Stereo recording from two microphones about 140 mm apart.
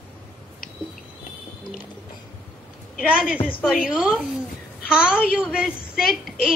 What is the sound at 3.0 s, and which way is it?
A woman's voice, 5° right (ahead or behind).